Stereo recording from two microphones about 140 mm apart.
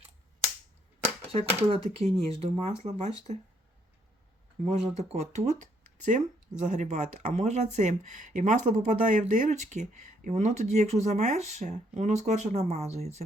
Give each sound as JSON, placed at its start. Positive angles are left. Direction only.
{"t": 1.3, "sound": "speech", "side_deg": -45}
{"t": 4.6, "sound": "speech", "side_deg": -50}